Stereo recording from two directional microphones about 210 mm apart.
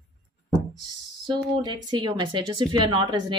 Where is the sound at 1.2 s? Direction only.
20° right (ahead or behind).